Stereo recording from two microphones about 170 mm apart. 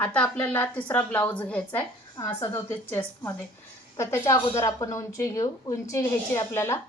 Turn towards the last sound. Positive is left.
turn(degrees=15)  # may be behind; listen again after turning